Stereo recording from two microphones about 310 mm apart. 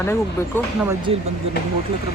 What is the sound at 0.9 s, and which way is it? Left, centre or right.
Speech, centre.